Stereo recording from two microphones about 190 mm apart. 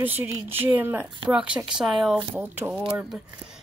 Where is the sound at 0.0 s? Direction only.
10° right (ahead or behind).